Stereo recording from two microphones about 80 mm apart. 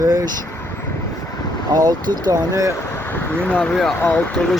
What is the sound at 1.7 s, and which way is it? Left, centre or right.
Speech, right.